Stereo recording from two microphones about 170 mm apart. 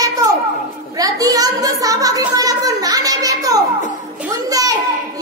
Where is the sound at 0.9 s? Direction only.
20° right (ahead or behind).